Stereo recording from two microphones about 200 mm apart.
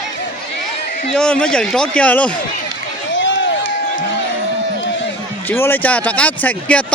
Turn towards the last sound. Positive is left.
turn(degrees=5)  # may be behind; listen again after turning